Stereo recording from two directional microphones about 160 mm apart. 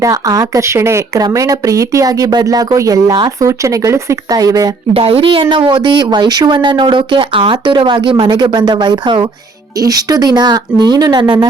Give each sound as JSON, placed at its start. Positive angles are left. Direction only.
{"t": 0.0, "sound": "speech", "side_deg": -20}
{"t": 4.9, "sound": "speech", "side_deg": -35}